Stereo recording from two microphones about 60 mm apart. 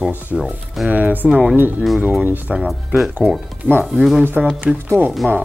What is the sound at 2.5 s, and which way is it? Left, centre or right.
Speech, centre.